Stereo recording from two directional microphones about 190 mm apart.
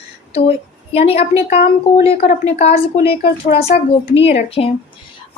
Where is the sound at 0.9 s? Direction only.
30° left (ahead or behind).